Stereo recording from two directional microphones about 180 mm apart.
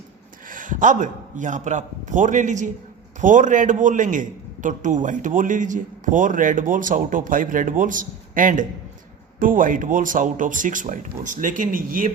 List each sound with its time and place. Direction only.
0.4 s a man's voice: 45° right (ahead or behind)